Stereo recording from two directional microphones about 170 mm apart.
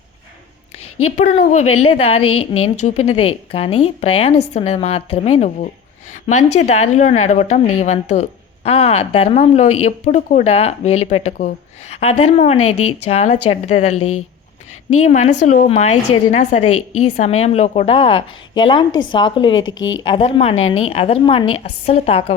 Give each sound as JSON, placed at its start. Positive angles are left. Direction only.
{"t": 1.5, "sound": "a woman's voice", "side_deg": 40}